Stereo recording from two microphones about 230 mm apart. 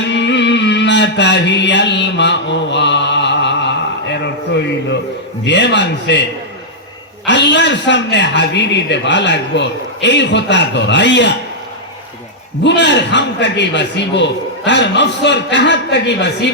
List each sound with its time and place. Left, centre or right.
0.1 s music: left
5.5 s a man's voice: left
7.3 s a man's voice: left
12.6 s a man's voice: left